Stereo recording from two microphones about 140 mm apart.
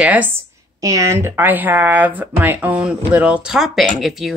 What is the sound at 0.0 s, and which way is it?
Speech, 10° right (ahead or behind).